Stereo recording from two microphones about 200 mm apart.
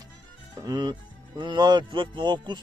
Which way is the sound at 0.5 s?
20° right (ahead or behind).